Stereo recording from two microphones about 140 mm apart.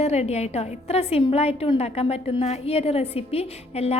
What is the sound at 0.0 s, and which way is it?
A woman's voice, 50° left (ahead or behind).